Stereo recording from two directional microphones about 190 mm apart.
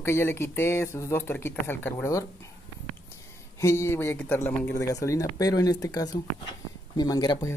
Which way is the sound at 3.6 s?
15° left (ahead or behind).